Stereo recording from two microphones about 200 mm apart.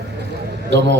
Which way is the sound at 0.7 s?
60° right (ahead or behind).